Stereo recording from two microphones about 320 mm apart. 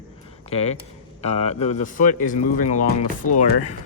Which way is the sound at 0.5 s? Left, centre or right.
Centre.